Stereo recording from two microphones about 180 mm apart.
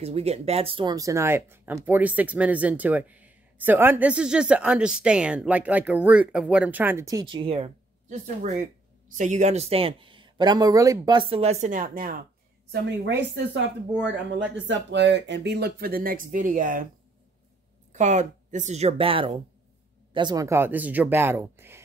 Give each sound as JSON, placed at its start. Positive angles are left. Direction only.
{"t": 0.0, "sound": "speech", "side_deg": -35}
{"t": 12.7, "sound": "speech", "side_deg": -75}
{"t": 14.7, "sound": "speech", "side_deg": -80}
{"t": 17.9, "sound": "speech", "side_deg": -40}